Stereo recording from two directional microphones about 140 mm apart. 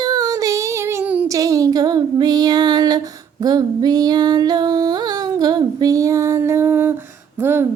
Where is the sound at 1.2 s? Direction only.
25° right (ahead or behind).